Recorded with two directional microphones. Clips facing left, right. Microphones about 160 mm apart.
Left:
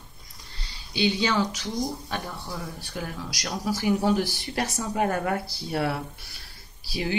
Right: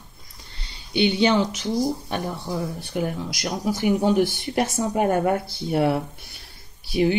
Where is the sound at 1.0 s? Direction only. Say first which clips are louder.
Right 4 dB; 25° right (ahead or behind).